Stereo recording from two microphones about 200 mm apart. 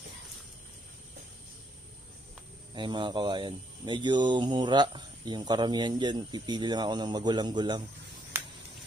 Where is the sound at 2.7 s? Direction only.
25° right (ahead or behind).